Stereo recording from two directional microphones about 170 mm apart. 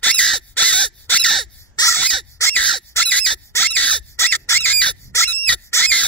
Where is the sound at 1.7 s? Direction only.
15° left (ahead or behind).